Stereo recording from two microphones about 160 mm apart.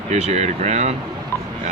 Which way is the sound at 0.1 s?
45° right (ahead or behind).